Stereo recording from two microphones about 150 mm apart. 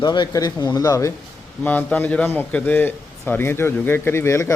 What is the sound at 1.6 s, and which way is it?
A man's voice, 10° left (ahead or behind).